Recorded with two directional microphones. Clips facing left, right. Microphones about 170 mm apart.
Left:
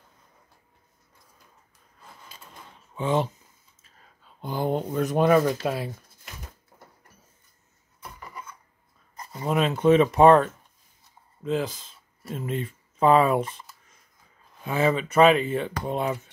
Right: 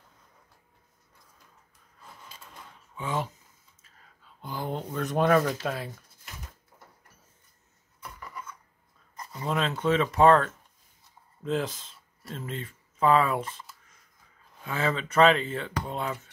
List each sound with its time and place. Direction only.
3.0 s speech: 25° left (ahead or behind)
4.4 s speech: 20° left (ahead or behind)
9.4 s speech: 15° left (ahead or behind)
11.4 s speech: centre (ahead or behind); by 16.2 s 20° left (ahead or behind)